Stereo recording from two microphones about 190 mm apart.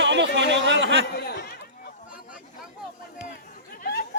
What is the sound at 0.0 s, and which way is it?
Speech, 70° right (ahead or behind).